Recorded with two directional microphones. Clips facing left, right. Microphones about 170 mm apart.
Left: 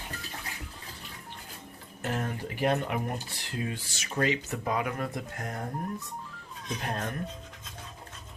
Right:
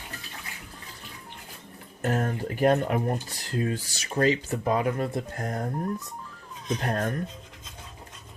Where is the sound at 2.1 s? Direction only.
45° right (ahead or behind).